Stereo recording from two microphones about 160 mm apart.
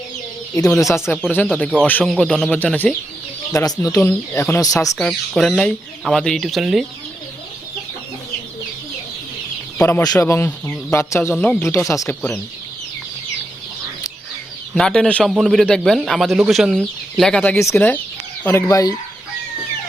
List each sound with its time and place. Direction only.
0.5 s speech: 20° left (ahead or behind)
1.0 s speech: 5° left (ahead or behind)
3.5 s speech: 20° left (ahead or behind)
4.9 s a man's voice: 5° left (ahead or behind)
9.8 s speech: 20° left (ahead or behind)
14.8 s a man's voice: 5° left (ahead or behind); by 18.9 s 20° left (ahead or behind)